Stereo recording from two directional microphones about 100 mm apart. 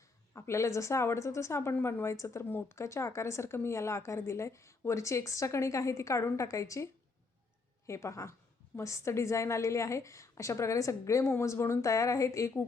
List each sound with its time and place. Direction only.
0.3 s a woman's voice: 30° left (ahead or behind)
7.9 s a woman's voice: 30° left (ahead or behind)